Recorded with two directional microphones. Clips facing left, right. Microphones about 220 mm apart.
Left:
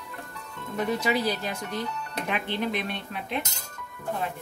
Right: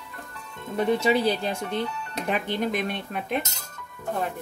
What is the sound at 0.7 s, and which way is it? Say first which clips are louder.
Speech: right 4 dB; 30° right (ahead or behind).